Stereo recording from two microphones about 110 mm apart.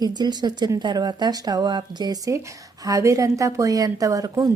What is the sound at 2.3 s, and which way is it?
A woman's voice, 30° right (ahead or behind).